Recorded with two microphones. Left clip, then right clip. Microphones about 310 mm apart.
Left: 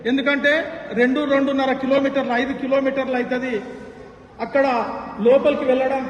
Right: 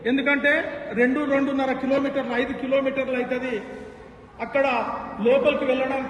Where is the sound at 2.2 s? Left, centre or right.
Centre.